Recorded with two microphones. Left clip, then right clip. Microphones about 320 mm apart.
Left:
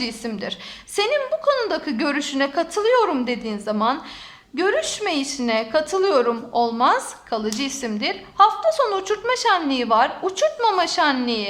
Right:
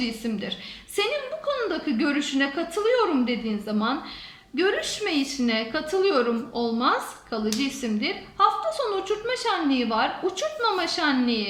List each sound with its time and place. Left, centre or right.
0.0 s a woman's voice: centre